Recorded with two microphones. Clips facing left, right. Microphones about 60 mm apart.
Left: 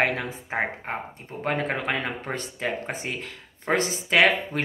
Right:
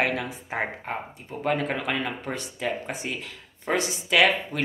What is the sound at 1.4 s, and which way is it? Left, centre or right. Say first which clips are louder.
Speech: even; left.